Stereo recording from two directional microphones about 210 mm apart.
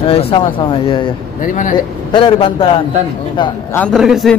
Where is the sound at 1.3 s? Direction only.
40° left (ahead or behind).